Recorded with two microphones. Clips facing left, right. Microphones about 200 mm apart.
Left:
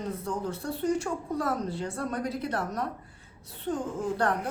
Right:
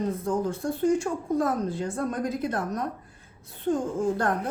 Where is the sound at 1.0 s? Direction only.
45° right (ahead or behind).